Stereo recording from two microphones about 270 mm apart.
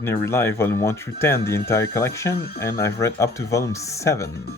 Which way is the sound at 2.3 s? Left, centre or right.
Left.